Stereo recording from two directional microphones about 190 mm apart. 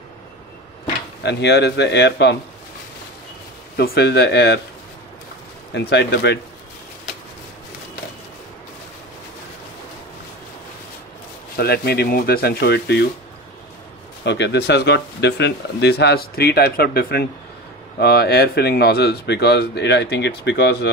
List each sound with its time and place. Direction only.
1.2 s speech: 60° left (ahead or behind)
3.7 s speech: 55° left (ahead or behind)
5.7 s speech: 65° left (ahead or behind)
11.5 s speech: 55° left (ahead or behind)
14.2 s speech: 65° left (ahead or behind)